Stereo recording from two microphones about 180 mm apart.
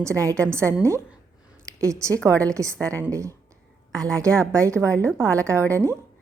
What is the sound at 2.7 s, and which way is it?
Speech, 5° left (ahead or behind).